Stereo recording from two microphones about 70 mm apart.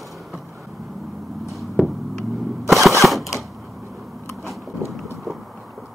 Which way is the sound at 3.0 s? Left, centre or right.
Centre.